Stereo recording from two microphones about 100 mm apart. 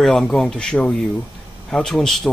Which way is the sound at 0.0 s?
5° left (ahead or behind).